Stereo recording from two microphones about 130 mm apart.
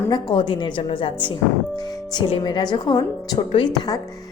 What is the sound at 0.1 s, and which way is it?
Speech, 35° left (ahead or behind).